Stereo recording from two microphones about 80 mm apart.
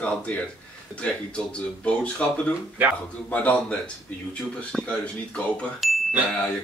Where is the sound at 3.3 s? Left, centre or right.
Centre.